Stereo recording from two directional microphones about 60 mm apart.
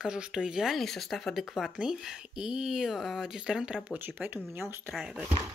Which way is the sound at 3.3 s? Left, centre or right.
Centre.